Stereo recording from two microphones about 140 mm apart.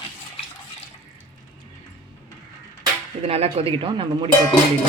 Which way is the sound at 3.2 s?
45° right (ahead or behind).